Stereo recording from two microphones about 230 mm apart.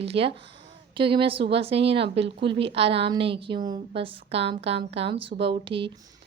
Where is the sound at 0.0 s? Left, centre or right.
Right.